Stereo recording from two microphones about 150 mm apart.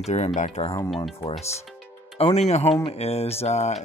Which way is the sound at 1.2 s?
35° left (ahead or behind).